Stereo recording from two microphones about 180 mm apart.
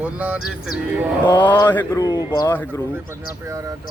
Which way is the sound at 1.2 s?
25° left (ahead or behind).